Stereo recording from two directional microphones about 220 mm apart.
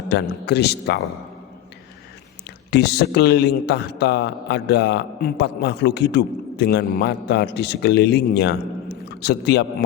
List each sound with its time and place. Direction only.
0.1 s a man's voice: 50° left (ahead or behind)
2.6 s a man's voice: 50° left (ahead or behind)